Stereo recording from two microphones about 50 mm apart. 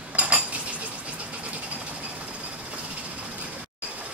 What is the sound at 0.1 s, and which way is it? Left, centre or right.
Cutlery, right.